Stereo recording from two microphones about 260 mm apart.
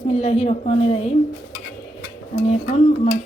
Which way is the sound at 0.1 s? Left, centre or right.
Left.